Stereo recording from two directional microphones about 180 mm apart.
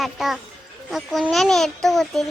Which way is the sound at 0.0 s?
Centre (ahead or behind).